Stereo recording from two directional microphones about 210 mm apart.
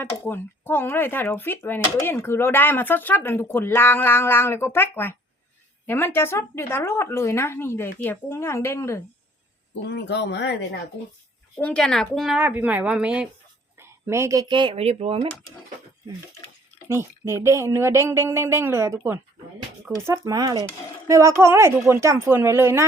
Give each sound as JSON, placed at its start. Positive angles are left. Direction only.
{"t": 0.0, "sound": "speech", "side_deg": 10}
{"t": 9.8, "sound": "speech", "side_deg": 55}
{"t": 11.5, "sound": "speech", "side_deg": 5}
{"t": 16.9, "sound": "speech", "side_deg": -10}